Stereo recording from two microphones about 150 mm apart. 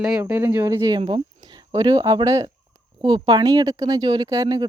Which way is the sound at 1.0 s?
35° right (ahead or behind).